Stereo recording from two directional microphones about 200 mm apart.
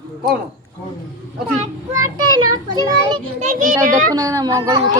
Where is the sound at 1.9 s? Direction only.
20° right (ahead or behind).